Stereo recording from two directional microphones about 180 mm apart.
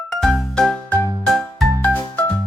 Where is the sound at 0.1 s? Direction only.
Centre (ahead or behind).